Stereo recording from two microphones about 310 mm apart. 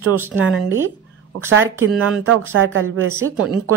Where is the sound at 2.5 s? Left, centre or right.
Right.